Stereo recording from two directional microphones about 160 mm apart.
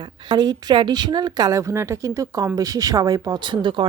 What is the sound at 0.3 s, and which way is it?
Speech, 25° right (ahead or behind).